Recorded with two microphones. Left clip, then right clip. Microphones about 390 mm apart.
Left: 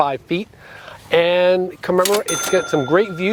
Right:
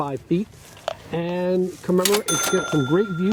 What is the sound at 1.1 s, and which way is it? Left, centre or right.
Speech, left.